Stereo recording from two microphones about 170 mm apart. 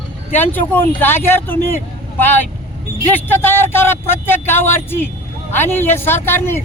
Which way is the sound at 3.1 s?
10° left (ahead or behind).